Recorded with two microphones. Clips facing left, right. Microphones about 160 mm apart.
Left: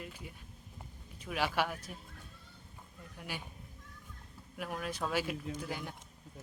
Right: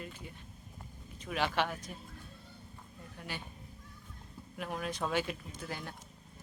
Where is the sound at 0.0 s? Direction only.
10° left (ahead or behind).